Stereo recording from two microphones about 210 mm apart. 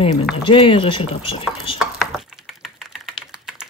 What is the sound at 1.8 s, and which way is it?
Typing, centre (ahead or behind).